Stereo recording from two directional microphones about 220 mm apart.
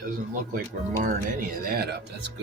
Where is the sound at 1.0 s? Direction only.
40° right (ahead or behind).